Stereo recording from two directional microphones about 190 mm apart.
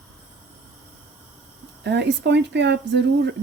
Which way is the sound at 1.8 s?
65° right (ahead or behind).